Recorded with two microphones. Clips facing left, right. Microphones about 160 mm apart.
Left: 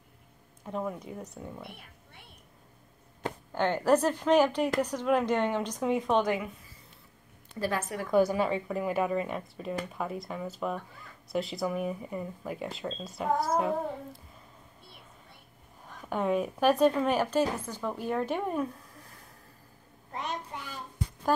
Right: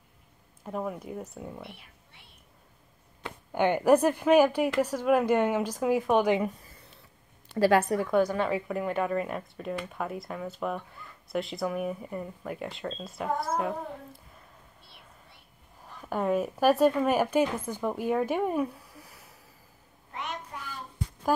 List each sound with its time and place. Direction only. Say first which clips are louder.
0.7 s speech: right 1 dB; 5° right (ahead or behind)
1.7 s a sound: left 1 dB; 50° left (ahead or behind)
3.5 s a woman's voice: right 3 dB; 15° right (ahead or behind)
7.5 s a woman's voice: right 9 dB; 80° right
8.1 s a woman's voice: left 3 dB; 5° left (ahead or behind)
16.0 s speech: right 1 dB; 5° right (ahead or behind)
20.1 s child singing: left 1 dB; 35° left (ahead or behind)